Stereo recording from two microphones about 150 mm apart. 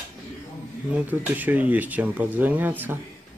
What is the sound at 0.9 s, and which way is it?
Speech, 10° right (ahead or behind).